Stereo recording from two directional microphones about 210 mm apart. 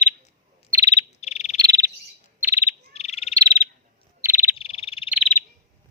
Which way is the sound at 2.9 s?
30° left (ahead or behind).